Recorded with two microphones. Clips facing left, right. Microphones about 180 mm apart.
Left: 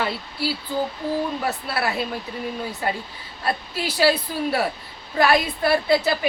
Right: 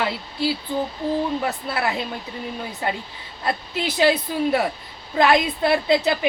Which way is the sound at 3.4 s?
20° right (ahead or behind).